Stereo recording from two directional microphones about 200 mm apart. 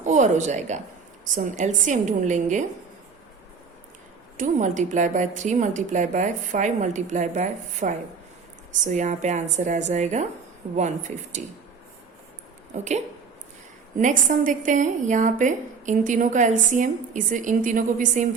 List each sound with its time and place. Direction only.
0.0 s a woman's voice: 35° right (ahead or behind)
4.4 s a woman's voice: 40° right (ahead or behind)
12.7 s a woman's voice: 35° right (ahead or behind)